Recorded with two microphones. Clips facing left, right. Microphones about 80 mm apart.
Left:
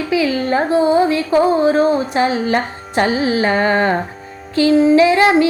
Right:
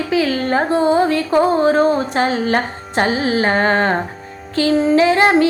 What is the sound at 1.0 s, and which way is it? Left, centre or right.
Music, right.